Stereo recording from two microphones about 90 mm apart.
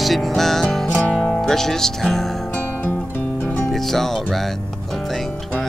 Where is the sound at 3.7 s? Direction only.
5° left (ahead or behind).